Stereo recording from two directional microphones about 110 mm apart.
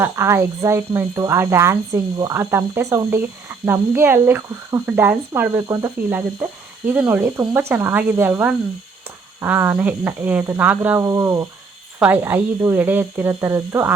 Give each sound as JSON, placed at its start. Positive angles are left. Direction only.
{"t": 0.0, "sound": "speech", "side_deg": -25}
{"t": 2.0, "sound": "speech", "side_deg": -35}
{"t": 2.3, "sound": "speech", "side_deg": -25}
{"t": 11.0, "sound": "speech", "side_deg": -30}
{"t": 11.9, "sound": "speech", "side_deg": -15}